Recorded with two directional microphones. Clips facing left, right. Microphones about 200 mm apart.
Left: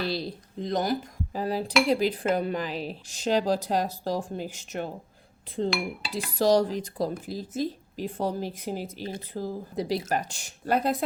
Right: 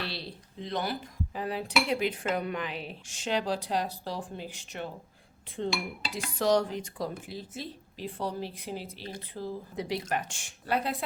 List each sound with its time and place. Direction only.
0.0 s dishes: 40° left (ahead or behind)
1.9 s speech: 35° left (ahead or behind)